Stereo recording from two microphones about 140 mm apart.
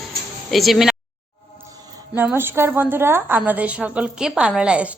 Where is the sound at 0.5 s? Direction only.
Centre (ahead or behind).